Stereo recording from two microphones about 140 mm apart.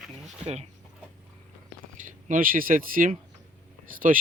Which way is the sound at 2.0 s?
70° right (ahead or behind).